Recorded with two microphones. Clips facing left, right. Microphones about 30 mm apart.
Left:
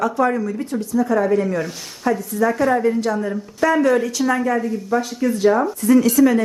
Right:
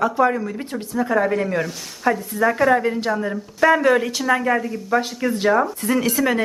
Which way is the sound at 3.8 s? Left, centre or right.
Right.